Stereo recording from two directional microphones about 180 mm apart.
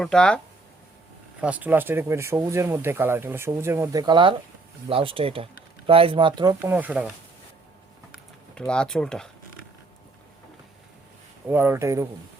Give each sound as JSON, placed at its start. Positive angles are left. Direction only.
{"t": 0.0, "sound": "speech", "side_deg": 5}
{"t": 1.4, "sound": "speech", "side_deg": -10}
{"t": 6.6, "sound": "speech", "side_deg": -10}
{"t": 8.1, "sound": "speech", "side_deg": 5}
{"t": 11.4, "sound": "speech", "side_deg": -10}